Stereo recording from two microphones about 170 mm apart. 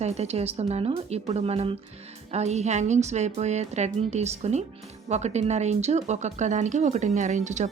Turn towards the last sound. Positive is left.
turn(degrees=-45)  # may be behind; listen again after turning